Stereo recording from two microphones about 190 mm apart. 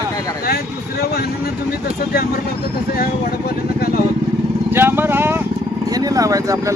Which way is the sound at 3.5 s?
50° left (ahead or behind).